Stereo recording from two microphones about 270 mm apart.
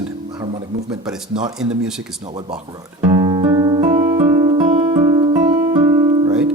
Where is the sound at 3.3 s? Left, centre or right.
Centre.